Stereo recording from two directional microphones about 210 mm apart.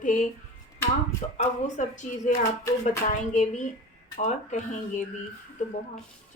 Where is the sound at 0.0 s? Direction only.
35° left (ahead or behind).